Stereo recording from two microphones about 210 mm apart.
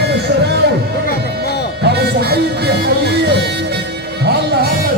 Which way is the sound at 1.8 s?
50° right (ahead or behind).